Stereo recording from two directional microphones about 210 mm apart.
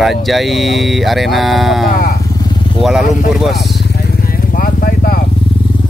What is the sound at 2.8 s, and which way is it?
Speech, centre (ahead or behind).